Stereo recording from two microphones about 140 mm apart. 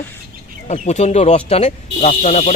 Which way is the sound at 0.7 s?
50° left (ahead or behind).